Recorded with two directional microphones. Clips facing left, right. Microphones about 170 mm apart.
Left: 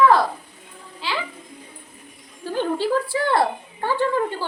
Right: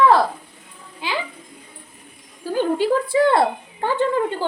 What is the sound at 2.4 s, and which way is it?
Speech, 10° right (ahead or behind).